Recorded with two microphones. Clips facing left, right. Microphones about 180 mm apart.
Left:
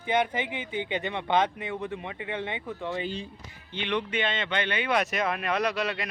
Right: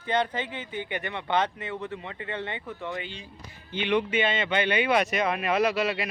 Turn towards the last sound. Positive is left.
turn(degrees=-5)  # may be behind; listen again after turning